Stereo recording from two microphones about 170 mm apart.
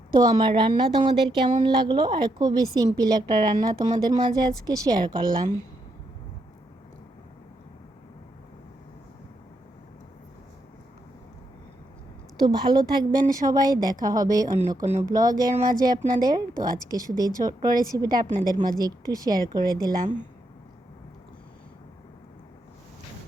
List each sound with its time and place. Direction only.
0.2 s speech: 25° right (ahead or behind)
12.4 s speech: 25° right (ahead or behind)